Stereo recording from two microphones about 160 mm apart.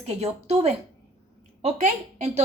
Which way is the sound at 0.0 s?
40° right (ahead or behind).